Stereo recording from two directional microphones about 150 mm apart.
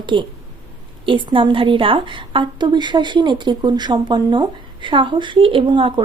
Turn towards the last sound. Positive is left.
turn(degrees=-35)  # may be behind; listen again after turning